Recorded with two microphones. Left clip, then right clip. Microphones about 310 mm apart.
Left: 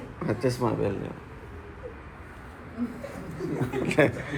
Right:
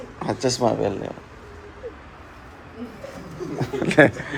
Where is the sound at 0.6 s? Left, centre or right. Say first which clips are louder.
Right 6 dB; centre.